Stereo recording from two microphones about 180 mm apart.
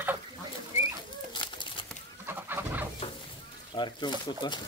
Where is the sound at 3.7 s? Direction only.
25° left (ahead or behind).